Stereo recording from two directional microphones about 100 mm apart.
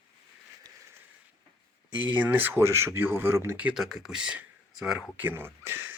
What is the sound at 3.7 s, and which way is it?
Speech, 5° right (ahead or behind).